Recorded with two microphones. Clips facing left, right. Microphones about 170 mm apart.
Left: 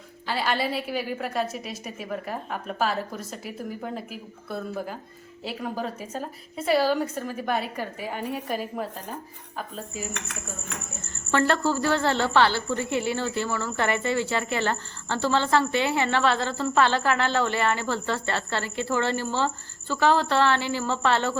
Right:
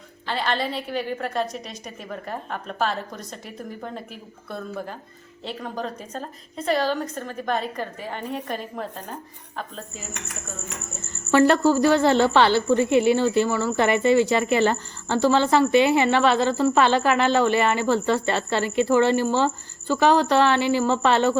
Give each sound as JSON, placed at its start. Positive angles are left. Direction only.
{"t": 0.3, "sound": "a woman's voice", "side_deg": 5}
{"t": 11.3, "sound": "a woman's voice", "side_deg": -15}